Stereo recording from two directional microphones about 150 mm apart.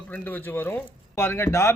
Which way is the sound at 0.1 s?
10° left (ahead or behind).